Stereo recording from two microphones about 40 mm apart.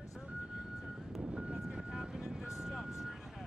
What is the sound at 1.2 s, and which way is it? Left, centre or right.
Vehicle, right.